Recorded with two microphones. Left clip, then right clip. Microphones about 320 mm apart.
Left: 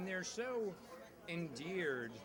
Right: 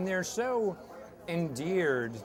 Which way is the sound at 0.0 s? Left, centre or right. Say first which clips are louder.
Right 11 dB; right.